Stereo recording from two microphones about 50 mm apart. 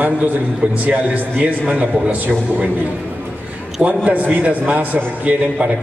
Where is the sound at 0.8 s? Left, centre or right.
Right.